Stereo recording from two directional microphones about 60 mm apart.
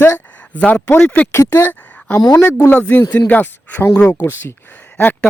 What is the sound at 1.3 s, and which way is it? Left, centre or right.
Speech, left.